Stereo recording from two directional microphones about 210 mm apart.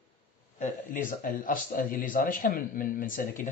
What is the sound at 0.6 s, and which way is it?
Speech, 40° left (ahead or behind).